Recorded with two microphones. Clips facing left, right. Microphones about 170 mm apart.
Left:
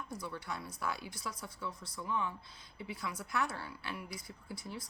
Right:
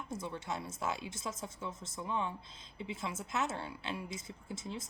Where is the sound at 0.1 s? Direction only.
25° right (ahead or behind).